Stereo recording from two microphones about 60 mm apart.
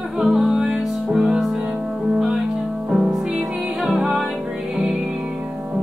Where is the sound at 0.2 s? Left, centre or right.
Centre.